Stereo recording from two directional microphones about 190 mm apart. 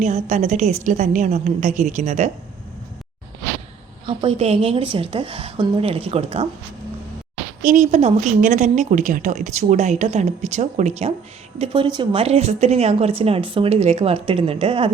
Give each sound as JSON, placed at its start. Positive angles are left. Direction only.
{"t": 0.0, "sound": "speech", "side_deg": -40}
{"t": 4.0, "sound": "a woman's voice", "side_deg": -30}
{"t": 7.6, "sound": "speech", "side_deg": -45}